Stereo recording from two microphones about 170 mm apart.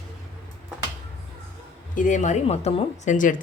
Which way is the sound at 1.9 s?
50° left (ahead or behind).